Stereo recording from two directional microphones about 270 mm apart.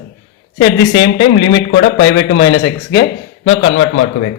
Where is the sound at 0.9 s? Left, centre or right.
Left.